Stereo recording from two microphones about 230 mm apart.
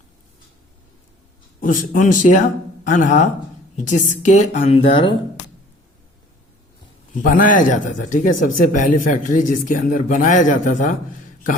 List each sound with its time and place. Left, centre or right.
1.6 s speech: left
7.1 s speech: left